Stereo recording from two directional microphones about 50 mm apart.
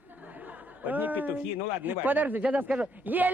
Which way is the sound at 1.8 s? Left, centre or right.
Right.